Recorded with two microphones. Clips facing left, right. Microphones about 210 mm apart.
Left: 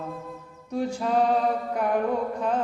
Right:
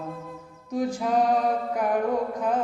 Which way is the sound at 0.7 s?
15° right (ahead or behind).